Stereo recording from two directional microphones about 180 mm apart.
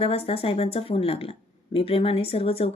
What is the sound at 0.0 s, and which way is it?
Speech, 35° left (ahead or behind).